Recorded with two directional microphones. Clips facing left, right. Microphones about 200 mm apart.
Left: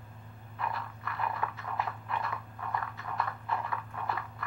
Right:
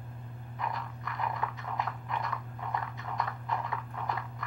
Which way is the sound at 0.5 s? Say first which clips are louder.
Even; 15° right (ahead or behind).